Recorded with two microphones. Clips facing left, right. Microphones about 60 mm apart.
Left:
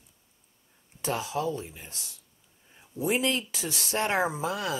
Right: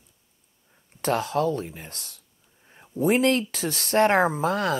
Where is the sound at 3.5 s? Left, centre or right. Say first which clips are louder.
Right 8 dB; right.